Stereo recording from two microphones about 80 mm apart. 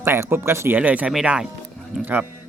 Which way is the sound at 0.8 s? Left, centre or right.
Centre.